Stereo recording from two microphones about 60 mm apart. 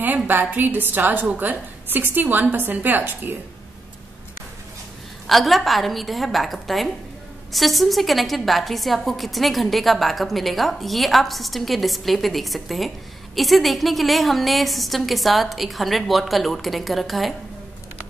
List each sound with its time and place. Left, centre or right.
0.0 s a woman's voice: right
5.2 s a woman's voice: centre